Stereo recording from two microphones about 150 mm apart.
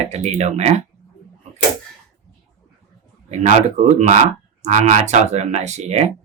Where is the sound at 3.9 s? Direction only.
55° right (ahead or behind).